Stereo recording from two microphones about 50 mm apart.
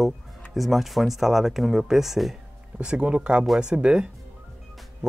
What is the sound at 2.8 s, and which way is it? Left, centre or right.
Speech, centre.